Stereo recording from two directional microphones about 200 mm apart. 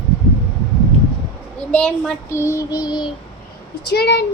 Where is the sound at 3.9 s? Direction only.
55° left (ahead or behind).